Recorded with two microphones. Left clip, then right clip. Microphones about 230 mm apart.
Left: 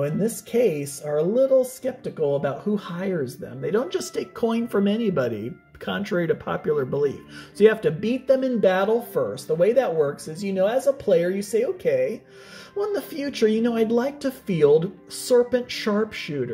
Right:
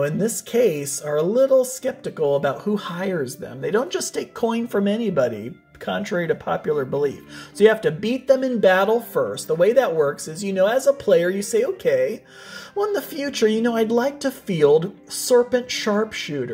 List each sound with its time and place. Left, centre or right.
0.0 s speech: centre